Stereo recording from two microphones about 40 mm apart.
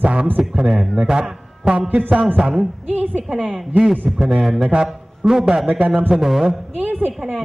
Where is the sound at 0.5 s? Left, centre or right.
Centre.